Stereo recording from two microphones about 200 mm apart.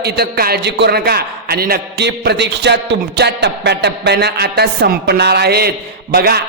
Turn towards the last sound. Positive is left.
turn(degrees=-50)  # may be behind; listen again after turning